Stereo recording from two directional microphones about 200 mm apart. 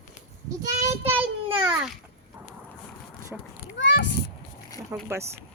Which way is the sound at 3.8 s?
65° left (ahead or behind).